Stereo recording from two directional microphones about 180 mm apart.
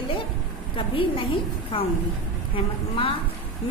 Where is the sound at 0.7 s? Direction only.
30° left (ahead or behind).